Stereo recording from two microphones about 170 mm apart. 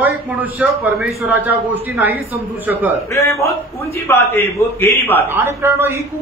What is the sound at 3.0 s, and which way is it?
A man's voice, 15° left (ahead or behind).